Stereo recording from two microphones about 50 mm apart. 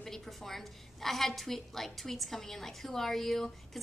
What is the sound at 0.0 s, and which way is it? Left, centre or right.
A woman's voice, centre.